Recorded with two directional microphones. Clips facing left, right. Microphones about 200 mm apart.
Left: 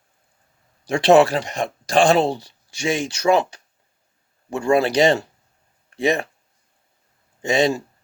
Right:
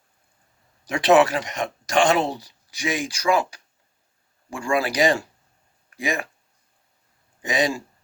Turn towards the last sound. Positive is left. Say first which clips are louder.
# left 5 dB
turn(degrees=25)  # may be behind; listen again after turning